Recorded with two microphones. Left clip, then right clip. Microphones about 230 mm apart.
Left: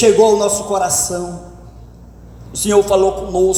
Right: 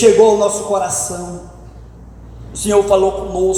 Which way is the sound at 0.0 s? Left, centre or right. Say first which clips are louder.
Right 1 dB; left.